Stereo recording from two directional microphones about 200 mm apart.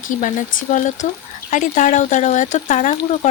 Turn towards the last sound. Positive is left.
turn(degrees=40)  # may be behind; listen again after turning